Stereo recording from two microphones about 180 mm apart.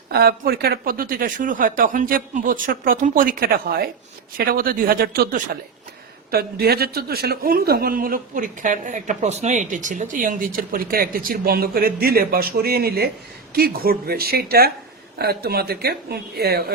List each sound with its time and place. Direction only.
0.1 s a man's voice: 60° right (ahead or behind)